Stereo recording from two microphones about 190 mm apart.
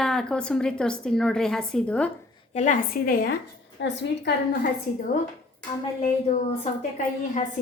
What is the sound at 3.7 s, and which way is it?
Speech, 65° left (ahead or behind).